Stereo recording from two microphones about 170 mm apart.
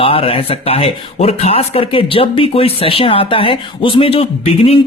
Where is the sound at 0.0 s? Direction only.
35° left (ahead or behind).